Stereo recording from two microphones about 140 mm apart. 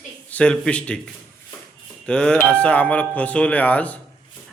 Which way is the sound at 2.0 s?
5° left (ahead or behind).